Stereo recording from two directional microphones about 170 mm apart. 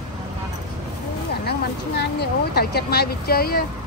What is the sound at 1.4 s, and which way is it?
Speech, 75° left (ahead or behind).